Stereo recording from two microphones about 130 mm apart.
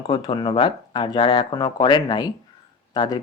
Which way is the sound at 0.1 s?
40° left (ahead or behind).